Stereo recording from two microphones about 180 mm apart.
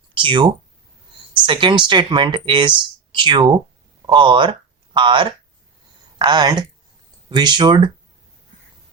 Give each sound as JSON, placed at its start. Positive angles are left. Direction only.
{"t": 0.1, "sound": "speech", "side_deg": -30}